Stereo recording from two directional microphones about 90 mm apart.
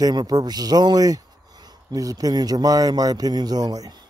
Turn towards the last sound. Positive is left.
turn(degrees=-45)  # may be behind; listen again after turning